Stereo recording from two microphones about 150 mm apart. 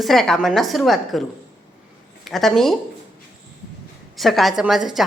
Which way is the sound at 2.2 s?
Centre (ahead or behind).